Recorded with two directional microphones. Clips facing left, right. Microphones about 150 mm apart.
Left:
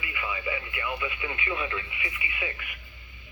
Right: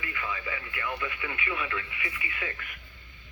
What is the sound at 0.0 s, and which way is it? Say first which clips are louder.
Speech: left 2 dB; 10° left (ahead or behind).